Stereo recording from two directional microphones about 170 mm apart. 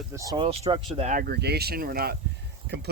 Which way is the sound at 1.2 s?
70° right (ahead or behind).